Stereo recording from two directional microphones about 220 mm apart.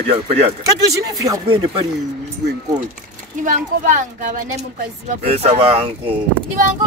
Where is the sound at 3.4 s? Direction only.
35° right (ahead or behind).